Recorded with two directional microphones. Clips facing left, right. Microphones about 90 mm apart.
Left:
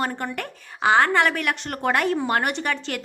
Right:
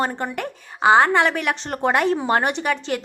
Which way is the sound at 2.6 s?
15° right (ahead or behind).